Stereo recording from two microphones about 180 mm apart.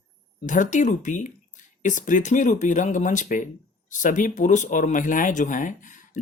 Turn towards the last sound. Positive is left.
turn(degrees=45)  # may be behind; listen again after turning